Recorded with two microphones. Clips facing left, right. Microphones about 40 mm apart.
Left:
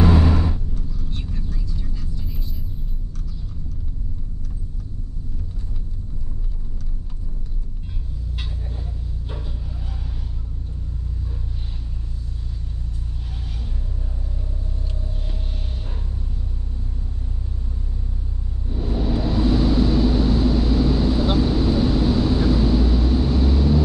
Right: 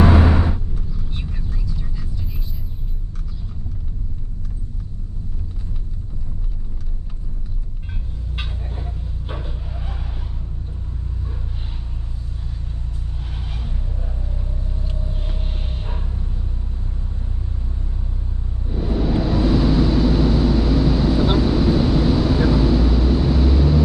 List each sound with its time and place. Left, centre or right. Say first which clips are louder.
0.0 s vehicle: right 2 dB; right
1.7 s vehicle: right 2 dB; centre
9.3 s vehicle: right 4 dB; right
13.3 s a sound: right 4 dB; right
18.7 s vehicle: right 3 dB; right